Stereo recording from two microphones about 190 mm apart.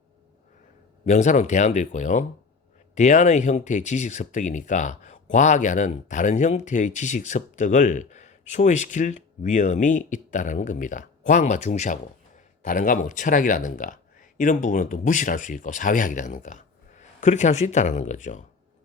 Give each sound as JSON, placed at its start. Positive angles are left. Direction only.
{"t": 1.0, "sound": "speech", "side_deg": 40}